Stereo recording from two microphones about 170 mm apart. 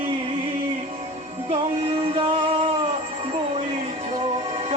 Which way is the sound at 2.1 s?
35° right (ahead or behind).